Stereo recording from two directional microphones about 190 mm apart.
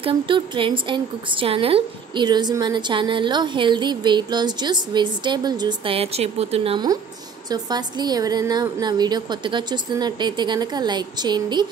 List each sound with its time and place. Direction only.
0.0 s a woman's voice: 25° right (ahead or behind)